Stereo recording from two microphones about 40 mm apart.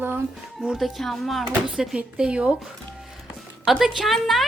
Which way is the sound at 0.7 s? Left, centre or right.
Centre.